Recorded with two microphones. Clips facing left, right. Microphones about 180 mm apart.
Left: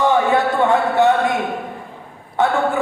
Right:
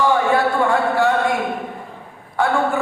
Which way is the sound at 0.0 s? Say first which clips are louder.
Left 1 dB; 20° left (ahead or behind).